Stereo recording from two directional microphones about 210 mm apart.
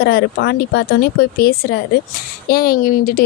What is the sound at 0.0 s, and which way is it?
Speech, 50° left (ahead or behind).